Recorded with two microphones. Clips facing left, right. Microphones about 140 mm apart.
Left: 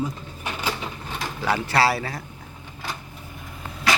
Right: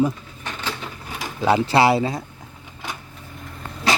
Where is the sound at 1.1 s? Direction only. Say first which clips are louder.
Right 6 dB; 15° right (ahead or behind).